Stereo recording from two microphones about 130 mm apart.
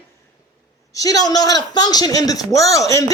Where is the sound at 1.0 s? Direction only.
30° left (ahead or behind).